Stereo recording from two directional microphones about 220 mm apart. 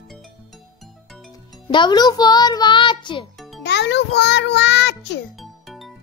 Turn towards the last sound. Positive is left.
turn(degrees=0)  # may be behind; listen again after turning